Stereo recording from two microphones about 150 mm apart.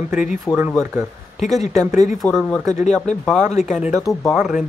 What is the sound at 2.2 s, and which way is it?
Speech, centre (ahead or behind).